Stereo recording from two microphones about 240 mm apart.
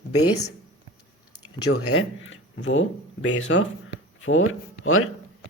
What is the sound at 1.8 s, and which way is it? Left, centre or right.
Speech, left.